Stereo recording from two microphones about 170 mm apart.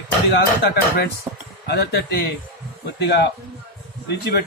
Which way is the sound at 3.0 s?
75° left (ahead or behind).